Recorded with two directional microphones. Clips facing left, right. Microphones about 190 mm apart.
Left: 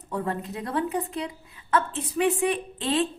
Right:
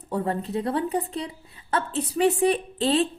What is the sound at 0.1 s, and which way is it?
A woman's voice, 30° right (ahead or behind).